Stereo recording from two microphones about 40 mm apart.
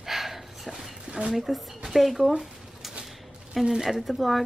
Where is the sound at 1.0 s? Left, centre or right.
Right.